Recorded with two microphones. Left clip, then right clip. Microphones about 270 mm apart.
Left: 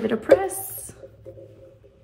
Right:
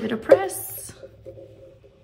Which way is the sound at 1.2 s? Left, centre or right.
Centre.